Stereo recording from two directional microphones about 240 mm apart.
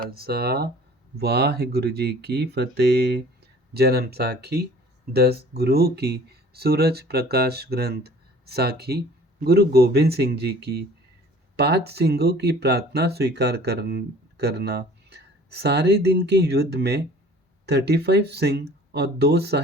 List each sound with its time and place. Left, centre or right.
0.0 s speech: right